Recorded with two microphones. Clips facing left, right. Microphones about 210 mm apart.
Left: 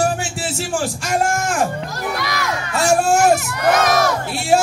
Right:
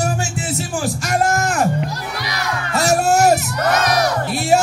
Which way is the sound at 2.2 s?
50° left (ahead or behind).